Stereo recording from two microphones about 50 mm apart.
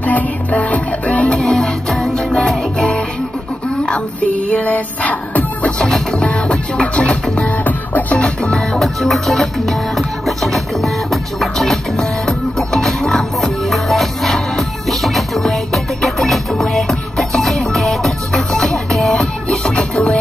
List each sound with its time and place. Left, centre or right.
0.0 s music: left
1.4 s music: centre
3.8 s music: left
5.8 s music: centre; by 8.2 s left
8.2 s music: centre